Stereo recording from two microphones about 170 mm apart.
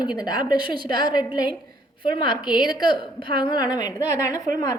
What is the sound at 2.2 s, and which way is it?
A woman's voice, 25° left (ahead or behind).